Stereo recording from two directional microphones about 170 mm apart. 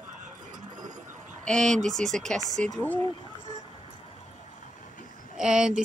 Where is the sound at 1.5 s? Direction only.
5° left (ahead or behind).